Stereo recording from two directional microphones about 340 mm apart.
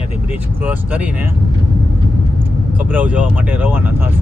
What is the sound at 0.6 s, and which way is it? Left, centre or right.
Speech, centre.